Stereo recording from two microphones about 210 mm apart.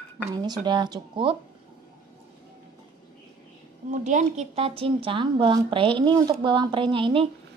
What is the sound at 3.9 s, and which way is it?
A woman's voice, 35° right (ahead or behind).